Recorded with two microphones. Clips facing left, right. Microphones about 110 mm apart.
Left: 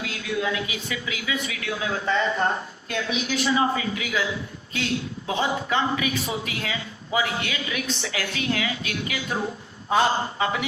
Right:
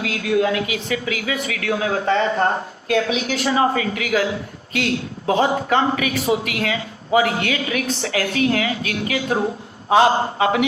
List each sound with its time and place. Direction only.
0.0 s speech: 55° right (ahead or behind)
5.2 s speech: 40° right (ahead or behind)
9.9 s a man's voice: 70° right (ahead or behind)